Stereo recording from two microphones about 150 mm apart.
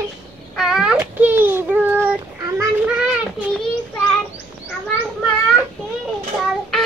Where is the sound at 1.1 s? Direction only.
10° right (ahead or behind).